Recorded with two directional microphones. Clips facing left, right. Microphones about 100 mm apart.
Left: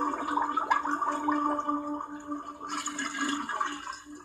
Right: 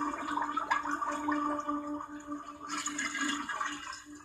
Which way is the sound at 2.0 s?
15° left (ahead or behind).